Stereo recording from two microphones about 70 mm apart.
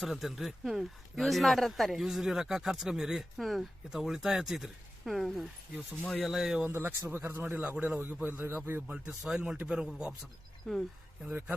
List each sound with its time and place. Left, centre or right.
0.0 s speech: centre
6.7 s speech: right
7.5 s a man's voice: centre
8.9 s speech: centre
10.7 s speech: centre